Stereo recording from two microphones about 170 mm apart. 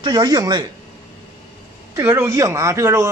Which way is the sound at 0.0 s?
25° right (ahead or behind).